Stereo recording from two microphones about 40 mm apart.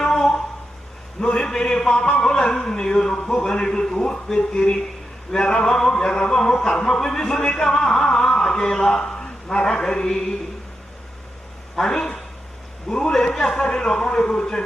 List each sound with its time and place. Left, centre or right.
0.0 s a sound: centre
1.2 s a man's voice: left
11.8 s a man's voice: centre